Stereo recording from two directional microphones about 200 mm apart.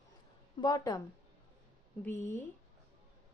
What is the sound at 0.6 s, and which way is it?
A woman's voice, 20° left (ahead or behind).